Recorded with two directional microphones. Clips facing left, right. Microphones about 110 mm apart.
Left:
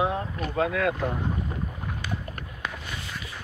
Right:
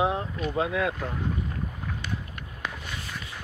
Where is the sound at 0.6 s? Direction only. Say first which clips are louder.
Left 2 dB; 20° right (ahead or behind).